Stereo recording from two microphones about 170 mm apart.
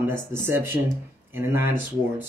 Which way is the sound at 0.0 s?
15° right (ahead or behind).